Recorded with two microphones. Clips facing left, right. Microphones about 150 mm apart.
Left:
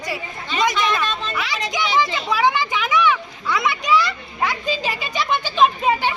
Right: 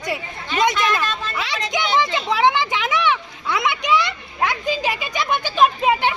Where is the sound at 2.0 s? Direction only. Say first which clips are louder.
Even; 20° right (ahead or behind).